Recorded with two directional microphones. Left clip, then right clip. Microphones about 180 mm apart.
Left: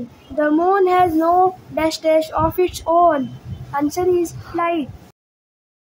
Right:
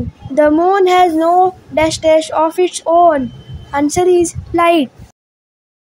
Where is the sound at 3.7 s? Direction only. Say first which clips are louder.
Right 6 dB; 35° right (ahead or behind).